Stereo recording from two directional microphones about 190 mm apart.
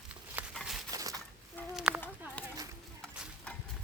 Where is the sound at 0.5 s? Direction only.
Centre (ahead or behind).